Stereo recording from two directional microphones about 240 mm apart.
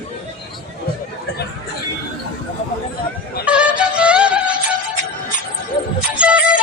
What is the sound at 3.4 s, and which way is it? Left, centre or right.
Music, centre.